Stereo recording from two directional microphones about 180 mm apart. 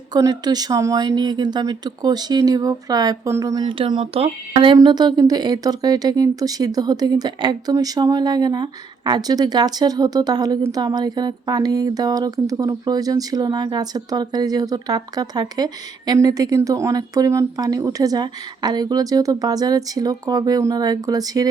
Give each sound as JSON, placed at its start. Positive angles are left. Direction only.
{"t": 0.1, "sound": "speech", "side_deg": -20}